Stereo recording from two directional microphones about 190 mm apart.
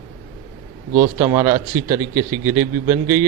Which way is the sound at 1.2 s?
20° right (ahead or behind).